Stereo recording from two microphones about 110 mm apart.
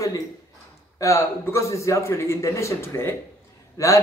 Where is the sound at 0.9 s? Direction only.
30° left (ahead or behind).